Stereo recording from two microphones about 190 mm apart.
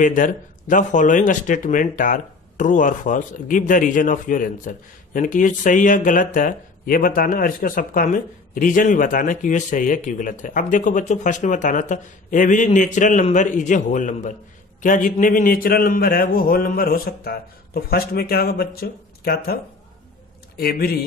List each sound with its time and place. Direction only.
0.0 s a man's voice: 45° left (ahead or behind)